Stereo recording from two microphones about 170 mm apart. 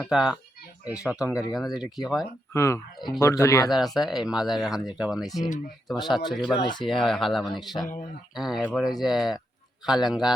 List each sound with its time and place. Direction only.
0.1 s speech: centre (ahead or behind)
2.5 s speech: 15° left (ahead or behind)
3.7 s speech: centre (ahead or behind)
6.6 s speech: 25° left (ahead or behind)
6.8 s speech: centre (ahead or behind)